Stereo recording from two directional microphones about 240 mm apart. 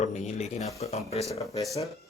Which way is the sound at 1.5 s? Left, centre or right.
Centre.